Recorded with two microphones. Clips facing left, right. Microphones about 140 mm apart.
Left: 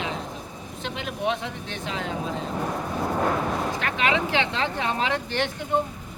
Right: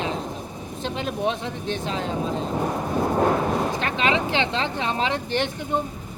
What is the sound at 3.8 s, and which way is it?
Speech, 25° right (ahead or behind).